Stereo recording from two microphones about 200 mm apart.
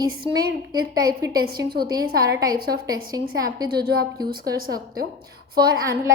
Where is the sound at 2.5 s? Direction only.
50° right (ahead or behind).